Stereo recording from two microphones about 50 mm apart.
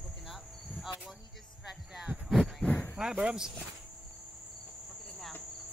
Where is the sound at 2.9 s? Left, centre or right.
Centre.